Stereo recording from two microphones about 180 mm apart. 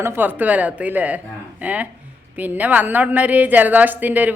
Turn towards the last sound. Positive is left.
turn(degrees=-10)  # may be behind; listen again after turning